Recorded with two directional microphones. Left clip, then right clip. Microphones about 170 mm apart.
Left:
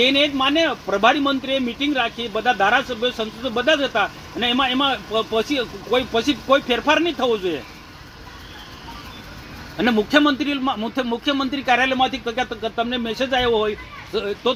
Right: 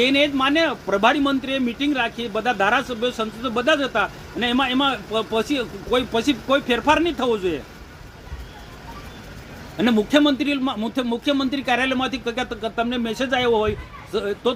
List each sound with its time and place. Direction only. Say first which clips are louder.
0.0 s speech: left 1 dB; 20° right (ahead or behind)
9.7 s speech: left 1 dB; 25° right (ahead or behind)